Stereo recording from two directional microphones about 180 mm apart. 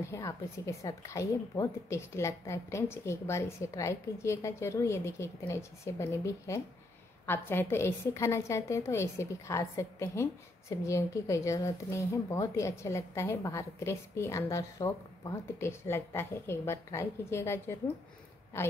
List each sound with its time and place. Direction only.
0.0 s speech: 15° left (ahead or behind)